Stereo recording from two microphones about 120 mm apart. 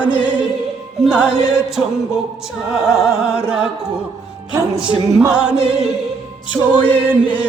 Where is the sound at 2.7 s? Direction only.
5° right (ahead or behind).